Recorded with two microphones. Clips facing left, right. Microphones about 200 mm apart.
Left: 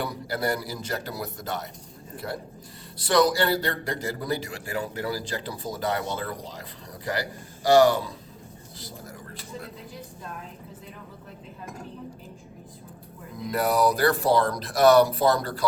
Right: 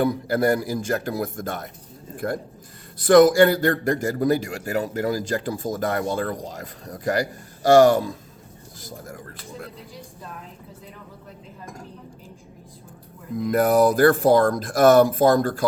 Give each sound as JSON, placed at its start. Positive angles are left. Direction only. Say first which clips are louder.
{"t": 0.0, "sound": "a man's voice", "louder": "right 8 dB", "side_deg": -50}
{"t": 8.8, "sound": "a sound", "louder": "right 4 dB", "side_deg": -50}
{"t": 13.3, "sound": "a man's voice", "louder": "right 6 dB", "side_deg": -50}